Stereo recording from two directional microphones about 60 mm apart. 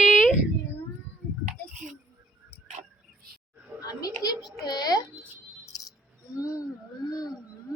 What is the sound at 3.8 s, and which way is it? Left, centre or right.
A child's voice, left.